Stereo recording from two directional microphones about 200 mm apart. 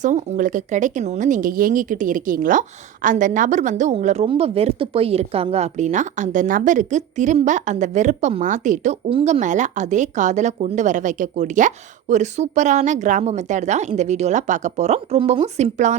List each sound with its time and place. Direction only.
0.0 s speech: 40° right (ahead or behind)